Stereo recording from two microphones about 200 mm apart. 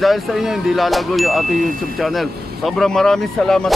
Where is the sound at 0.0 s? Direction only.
Centre (ahead or behind).